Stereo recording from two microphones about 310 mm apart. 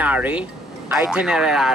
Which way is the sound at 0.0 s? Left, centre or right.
Centre.